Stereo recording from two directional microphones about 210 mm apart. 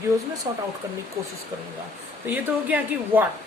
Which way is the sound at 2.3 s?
10° right (ahead or behind).